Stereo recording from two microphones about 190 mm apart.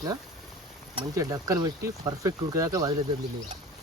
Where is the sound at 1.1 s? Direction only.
20° right (ahead or behind).